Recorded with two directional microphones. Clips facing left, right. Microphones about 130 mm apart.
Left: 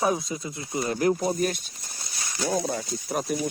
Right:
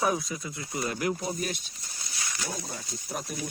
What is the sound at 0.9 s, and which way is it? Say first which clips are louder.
Speech: left 10 dB; 35° left (ahead or behind).